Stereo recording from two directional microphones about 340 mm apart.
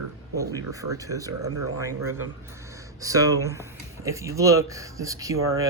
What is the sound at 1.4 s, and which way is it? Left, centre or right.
Speech, right.